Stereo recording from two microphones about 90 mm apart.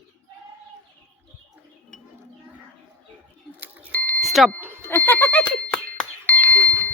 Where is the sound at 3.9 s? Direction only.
20° left (ahead or behind).